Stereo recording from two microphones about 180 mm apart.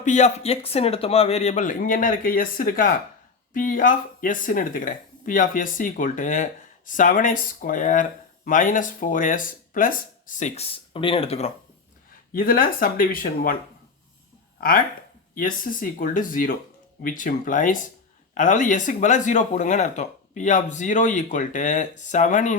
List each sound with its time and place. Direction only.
0.0 s speech: 40° left (ahead or behind)
12.3 s speech: 55° left (ahead or behind)
15.4 s speech: 50° left (ahead or behind)